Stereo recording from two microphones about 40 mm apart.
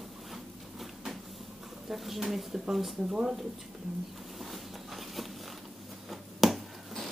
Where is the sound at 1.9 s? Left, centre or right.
Centre.